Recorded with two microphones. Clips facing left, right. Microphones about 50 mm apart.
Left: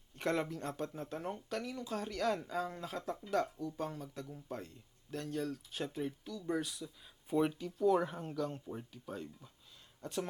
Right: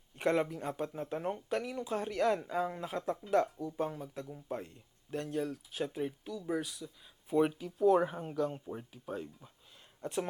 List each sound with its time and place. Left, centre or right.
0.2 s speech: centre
7.4 s speech: centre